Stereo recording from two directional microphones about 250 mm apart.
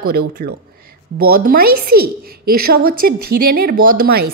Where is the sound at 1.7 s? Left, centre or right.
Right.